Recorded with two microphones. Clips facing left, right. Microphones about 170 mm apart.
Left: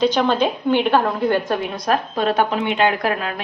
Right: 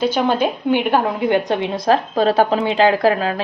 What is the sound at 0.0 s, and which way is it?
A woman's voice, 10° right (ahead or behind).